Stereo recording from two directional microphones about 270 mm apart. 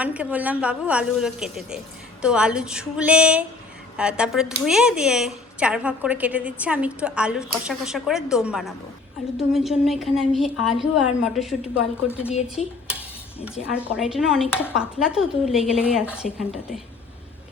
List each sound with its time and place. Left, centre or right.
0.0 s speech: centre
13.9 s speech: centre